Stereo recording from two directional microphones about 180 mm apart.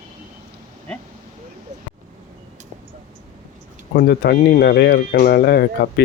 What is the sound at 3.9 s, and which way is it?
Speech, 60° left (ahead or behind).